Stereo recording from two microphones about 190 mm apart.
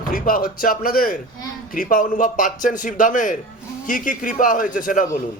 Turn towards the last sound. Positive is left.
turn(degrees=45)  # may be behind; listen again after turning